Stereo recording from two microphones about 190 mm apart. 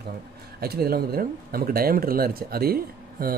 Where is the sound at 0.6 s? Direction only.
55° right (ahead or behind).